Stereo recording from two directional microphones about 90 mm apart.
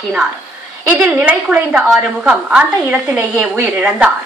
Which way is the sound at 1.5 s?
10° right (ahead or behind).